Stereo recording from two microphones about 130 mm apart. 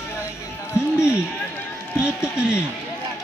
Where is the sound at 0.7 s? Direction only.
20° left (ahead or behind).